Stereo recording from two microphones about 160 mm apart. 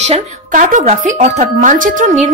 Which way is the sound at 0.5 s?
55° right (ahead or behind).